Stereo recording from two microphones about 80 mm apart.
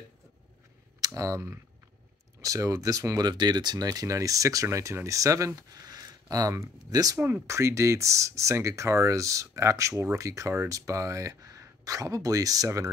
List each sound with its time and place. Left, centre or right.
1.0 s speech: right
3.3 s speech: right
7.2 s speech: right
7.4 s speech: right